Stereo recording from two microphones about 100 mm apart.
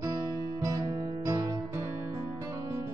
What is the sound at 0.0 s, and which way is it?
Music, 30° right (ahead or behind).